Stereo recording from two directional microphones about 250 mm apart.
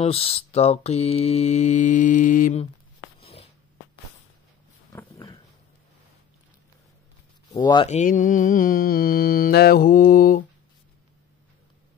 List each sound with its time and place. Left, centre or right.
0.0 s mantra: left
3.2 s a sound: left
4.9 s dog: centre
7.5 s mantra: centre; by 10.4 s left